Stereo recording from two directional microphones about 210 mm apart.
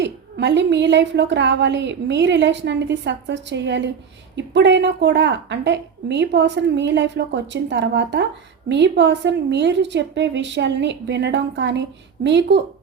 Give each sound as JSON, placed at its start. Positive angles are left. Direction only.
{"t": 0.0, "sound": "a woman's voice", "side_deg": -55}